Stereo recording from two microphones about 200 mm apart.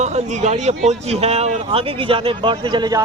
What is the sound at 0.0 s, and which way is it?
Speech, 35° right (ahead or behind).